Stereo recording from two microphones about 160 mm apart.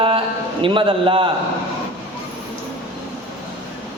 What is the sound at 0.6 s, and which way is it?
Speech, 30° right (ahead or behind).